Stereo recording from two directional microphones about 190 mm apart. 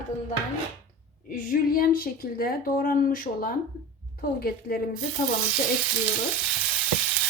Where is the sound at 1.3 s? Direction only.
50° left (ahead or behind).